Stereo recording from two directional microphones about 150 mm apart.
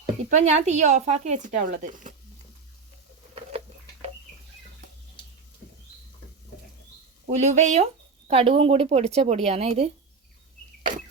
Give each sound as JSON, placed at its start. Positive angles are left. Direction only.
{"t": 0.3, "sound": "speech", "side_deg": -50}
{"t": 7.3, "sound": "speech", "side_deg": -50}
{"t": 8.3, "sound": "speech", "side_deg": -40}